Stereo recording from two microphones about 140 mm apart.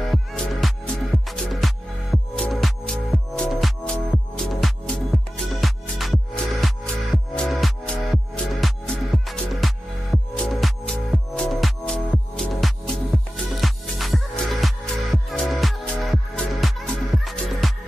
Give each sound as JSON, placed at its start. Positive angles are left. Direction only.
{"t": 0.1, "sound": "music", "side_deg": 0}